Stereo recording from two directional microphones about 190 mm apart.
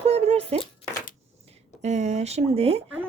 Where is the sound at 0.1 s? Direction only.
30° right (ahead or behind).